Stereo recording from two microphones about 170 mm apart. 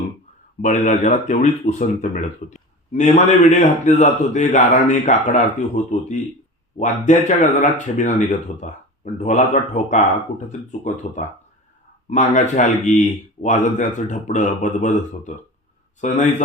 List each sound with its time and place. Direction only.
0.6 s a man's voice: 45° left (ahead or behind)